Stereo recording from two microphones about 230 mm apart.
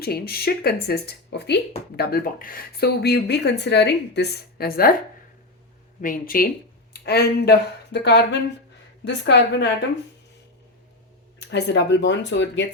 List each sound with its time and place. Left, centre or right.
0.0 s a woman's voice: left
6.0 s a woman's voice: left
11.3 s a woman's voice: left